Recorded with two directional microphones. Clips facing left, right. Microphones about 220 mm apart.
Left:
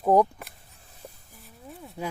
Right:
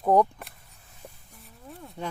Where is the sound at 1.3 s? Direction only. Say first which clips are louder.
Right 1 dB; 5° left (ahead or behind).